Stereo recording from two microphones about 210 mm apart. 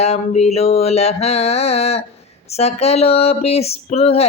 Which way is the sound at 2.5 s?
30° left (ahead or behind).